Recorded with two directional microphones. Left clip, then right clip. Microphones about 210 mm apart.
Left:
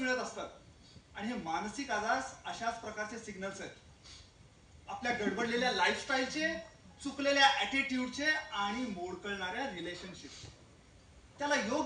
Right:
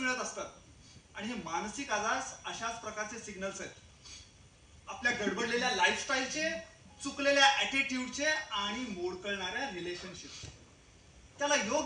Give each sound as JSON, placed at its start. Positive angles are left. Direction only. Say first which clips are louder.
{"t": 0.1, "sound": "a man's voice", "louder": "even", "side_deg": 55}
{"t": 5.0, "sound": "a man's voice", "louder": "right 2 dB", "side_deg": 50}
{"t": 11.4, "sound": "a man's voice", "louder": "right 2 dB", "side_deg": 55}